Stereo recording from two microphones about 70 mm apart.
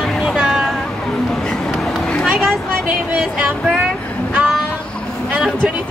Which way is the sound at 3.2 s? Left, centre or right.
Centre.